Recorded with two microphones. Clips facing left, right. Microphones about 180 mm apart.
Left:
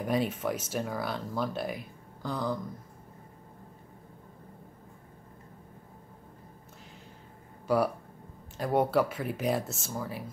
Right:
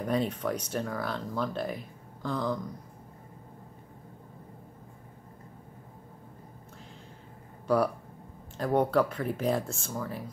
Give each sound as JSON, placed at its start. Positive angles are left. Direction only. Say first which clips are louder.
{"t": 0.0, "sound": "speech", "louder": "even", "side_deg": 5}
{"t": 7.6, "sound": "speech", "louder": "right 1 dB", "side_deg": 0}